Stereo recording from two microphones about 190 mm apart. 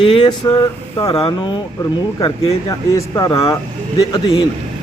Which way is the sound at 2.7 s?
20° left (ahead or behind).